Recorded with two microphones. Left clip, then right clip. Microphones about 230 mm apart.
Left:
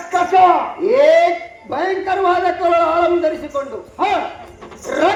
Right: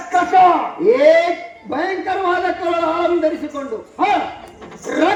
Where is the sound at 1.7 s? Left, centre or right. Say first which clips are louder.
Left 2 dB; left.